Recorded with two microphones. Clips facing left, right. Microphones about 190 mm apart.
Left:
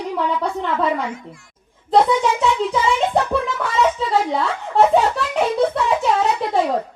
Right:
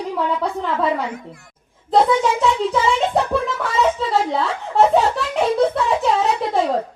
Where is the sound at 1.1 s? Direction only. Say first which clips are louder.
Right 1 dB; 60° right (ahead or behind).